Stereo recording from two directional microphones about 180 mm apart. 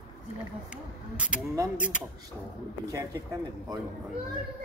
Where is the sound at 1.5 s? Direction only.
15° right (ahead or behind).